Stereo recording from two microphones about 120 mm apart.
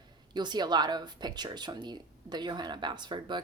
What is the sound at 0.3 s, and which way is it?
Speech, 35° right (ahead or behind).